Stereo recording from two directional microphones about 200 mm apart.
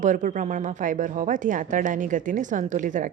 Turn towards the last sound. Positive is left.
turn(degrees=-40)  # may be behind; listen again after turning